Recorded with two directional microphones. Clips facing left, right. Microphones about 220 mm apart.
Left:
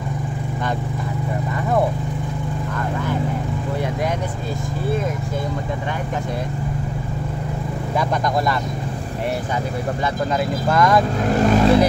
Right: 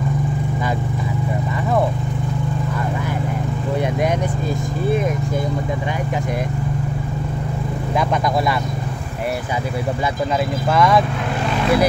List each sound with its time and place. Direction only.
10.7 s speech: 5° right (ahead or behind)
11.3 s vehicle: 45° left (ahead or behind)